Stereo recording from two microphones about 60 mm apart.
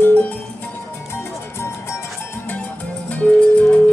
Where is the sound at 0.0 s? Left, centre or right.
Left.